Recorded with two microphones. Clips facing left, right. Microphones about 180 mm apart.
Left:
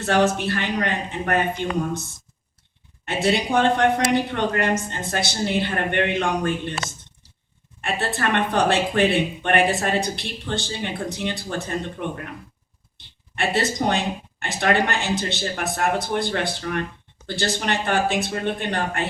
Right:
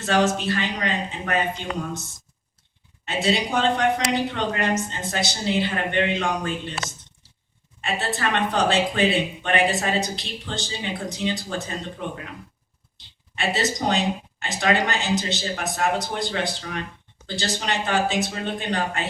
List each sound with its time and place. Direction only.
0.0 s speech: 55° left (ahead or behind)
3.1 s speech: 55° left (ahead or behind)
7.8 s speech: 55° left (ahead or behind)
13.3 s speech: 60° left (ahead or behind)